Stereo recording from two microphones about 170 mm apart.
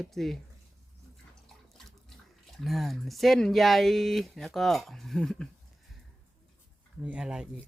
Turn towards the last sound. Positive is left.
turn(degrees=-5)  # may be behind; listen again after turning